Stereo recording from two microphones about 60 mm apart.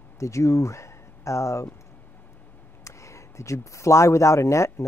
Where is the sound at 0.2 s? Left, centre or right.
Left.